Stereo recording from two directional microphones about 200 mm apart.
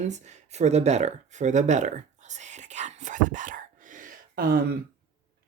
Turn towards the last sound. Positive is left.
turn(degrees=-45)  # may be behind; listen again after turning